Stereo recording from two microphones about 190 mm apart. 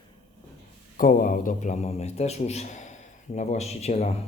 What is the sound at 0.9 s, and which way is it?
Speech, 45° left (ahead or behind).